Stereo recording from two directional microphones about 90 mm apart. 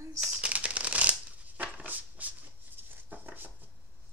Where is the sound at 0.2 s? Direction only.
10° right (ahead or behind).